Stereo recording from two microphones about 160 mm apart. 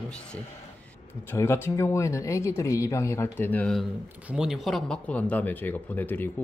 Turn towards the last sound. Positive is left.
turn(degrees=10)  # may be behind; listen again after turning